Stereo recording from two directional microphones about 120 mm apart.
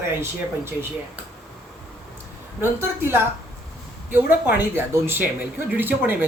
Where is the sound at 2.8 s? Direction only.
20° right (ahead or behind).